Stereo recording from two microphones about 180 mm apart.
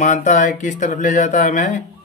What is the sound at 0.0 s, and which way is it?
Speech, 40° left (ahead or behind).